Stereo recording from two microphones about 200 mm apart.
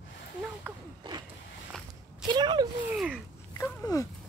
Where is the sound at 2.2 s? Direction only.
20° right (ahead or behind).